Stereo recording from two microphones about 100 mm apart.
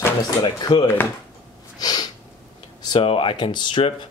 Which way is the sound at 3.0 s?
65° left (ahead or behind).